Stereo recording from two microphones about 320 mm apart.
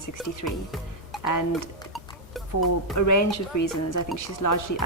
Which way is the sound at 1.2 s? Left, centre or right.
Left.